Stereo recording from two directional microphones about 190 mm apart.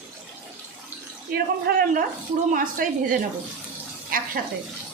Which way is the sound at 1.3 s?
50° right (ahead or behind).